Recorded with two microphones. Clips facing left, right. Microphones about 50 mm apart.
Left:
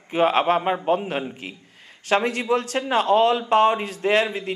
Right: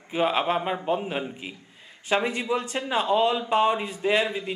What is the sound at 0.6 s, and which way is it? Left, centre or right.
Speech, centre.